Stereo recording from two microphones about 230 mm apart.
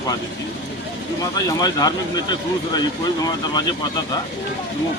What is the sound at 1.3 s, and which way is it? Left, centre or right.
Speech, centre.